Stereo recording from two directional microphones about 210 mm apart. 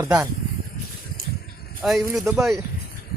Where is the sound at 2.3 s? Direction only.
Centre (ahead or behind).